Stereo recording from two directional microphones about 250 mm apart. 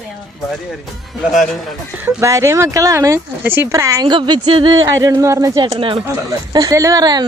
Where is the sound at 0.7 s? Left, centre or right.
Centre.